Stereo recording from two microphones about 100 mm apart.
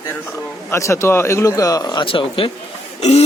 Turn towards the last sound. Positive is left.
turn(degrees=90)